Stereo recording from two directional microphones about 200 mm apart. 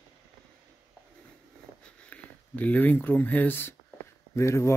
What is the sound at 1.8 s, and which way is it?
Speech, 5° left (ahead or behind).